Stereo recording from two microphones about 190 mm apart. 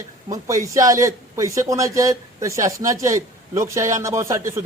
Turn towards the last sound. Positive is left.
turn(degrees=-15)  # may be behind; listen again after turning